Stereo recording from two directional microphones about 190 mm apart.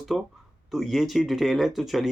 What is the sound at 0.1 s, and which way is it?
Speech, centre (ahead or behind).